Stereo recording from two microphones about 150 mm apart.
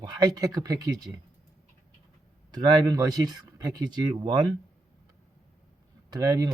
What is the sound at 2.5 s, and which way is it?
Speech, 25° right (ahead or behind).